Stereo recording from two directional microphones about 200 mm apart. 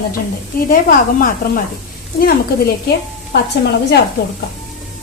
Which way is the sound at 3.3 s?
55° left (ahead or behind).